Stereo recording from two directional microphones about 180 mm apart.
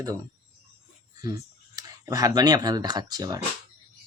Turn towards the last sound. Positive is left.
turn(degrees=-20)  # may be behind; listen again after turning